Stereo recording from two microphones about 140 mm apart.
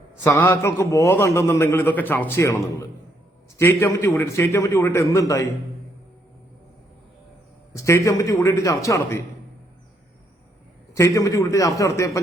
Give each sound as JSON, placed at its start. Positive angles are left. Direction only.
{"t": 0.3, "sound": "a man's voice", "side_deg": 15}
{"t": 3.6, "sound": "a man's voice", "side_deg": 15}
{"t": 7.7, "sound": "a man's voice", "side_deg": 20}
{"t": 10.9, "sound": "a man's voice", "side_deg": 25}